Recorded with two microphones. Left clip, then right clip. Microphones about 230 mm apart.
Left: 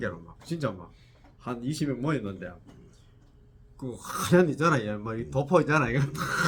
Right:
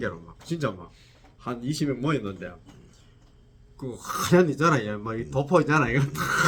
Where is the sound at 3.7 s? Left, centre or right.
Centre.